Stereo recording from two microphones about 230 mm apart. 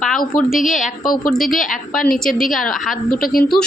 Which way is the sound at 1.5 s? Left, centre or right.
Left.